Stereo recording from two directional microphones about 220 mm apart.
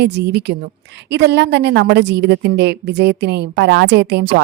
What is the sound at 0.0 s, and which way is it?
Speech, 50° right (ahead or behind).